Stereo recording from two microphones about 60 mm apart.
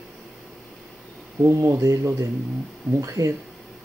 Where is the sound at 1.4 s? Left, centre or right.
Right.